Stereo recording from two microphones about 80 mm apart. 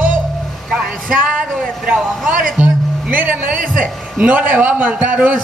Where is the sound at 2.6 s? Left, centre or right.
Centre.